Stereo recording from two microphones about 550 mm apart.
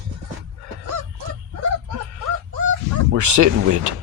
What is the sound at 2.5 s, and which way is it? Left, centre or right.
Goose, right.